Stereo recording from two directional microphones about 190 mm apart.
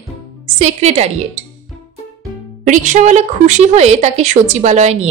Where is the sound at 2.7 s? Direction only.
40° right (ahead or behind).